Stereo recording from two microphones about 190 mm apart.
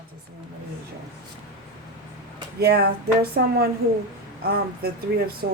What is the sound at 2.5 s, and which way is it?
Speech, 55° right (ahead or behind).